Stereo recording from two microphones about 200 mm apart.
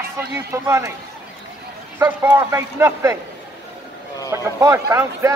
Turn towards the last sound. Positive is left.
turn(degrees=-15)  # may be behind; listen again after turning